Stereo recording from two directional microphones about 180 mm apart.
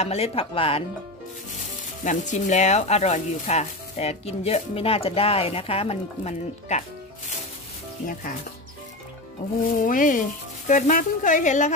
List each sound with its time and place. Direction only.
0.0 s speech: 35° left (ahead or behind)
2.0 s speech: 40° left (ahead or behind)
8.1 s speech: 50° left (ahead or behind)
9.8 s speech: 50° left (ahead or behind)